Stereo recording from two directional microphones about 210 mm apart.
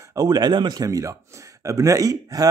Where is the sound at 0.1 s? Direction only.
20° right (ahead or behind).